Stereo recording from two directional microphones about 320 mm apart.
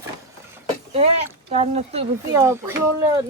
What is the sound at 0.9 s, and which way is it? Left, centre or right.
Speech, centre.